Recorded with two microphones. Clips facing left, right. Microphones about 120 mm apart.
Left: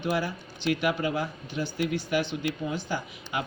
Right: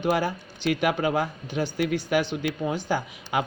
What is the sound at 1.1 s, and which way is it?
Speech, 50° right (ahead or behind).